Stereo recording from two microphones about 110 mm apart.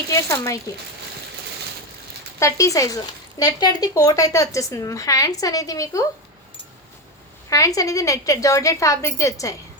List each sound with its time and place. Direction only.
0.1 s a woman's voice: 25° left (ahead or behind)
2.4 s speech: 30° left (ahead or behind)
7.5 s a woman's voice: 30° left (ahead or behind)